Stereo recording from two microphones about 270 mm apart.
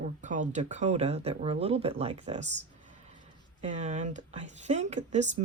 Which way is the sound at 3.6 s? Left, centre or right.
Right.